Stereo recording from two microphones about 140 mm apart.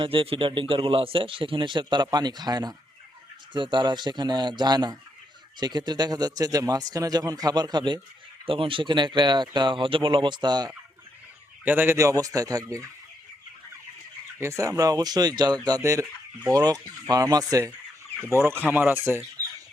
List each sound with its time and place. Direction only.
0.0 s speech: 40° right (ahead or behind)
11.6 s speech: 15° right (ahead or behind)
14.3 s speech: 20° right (ahead or behind)